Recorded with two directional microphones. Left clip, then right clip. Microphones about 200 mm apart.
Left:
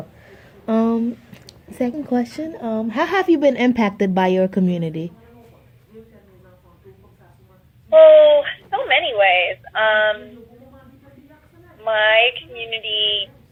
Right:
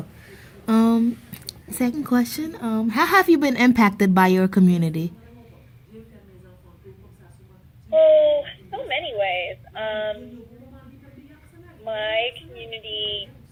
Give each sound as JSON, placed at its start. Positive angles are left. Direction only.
{"t": 0.7, "sound": "speech", "side_deg": -45}
{"t": 7.9, "sound": "a woman's voice", "side_deg": 15}
{"t": 11.8, "sound": "speech", "side_deg": 20}